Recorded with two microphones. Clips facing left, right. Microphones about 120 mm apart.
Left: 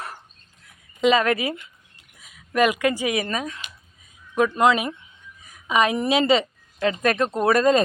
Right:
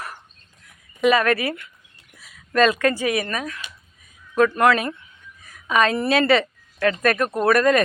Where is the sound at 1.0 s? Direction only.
20° left (ahead or behind).